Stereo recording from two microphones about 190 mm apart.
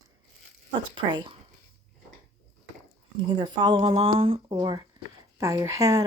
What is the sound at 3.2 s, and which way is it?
A woman's voice, 25° right (ahead or behind).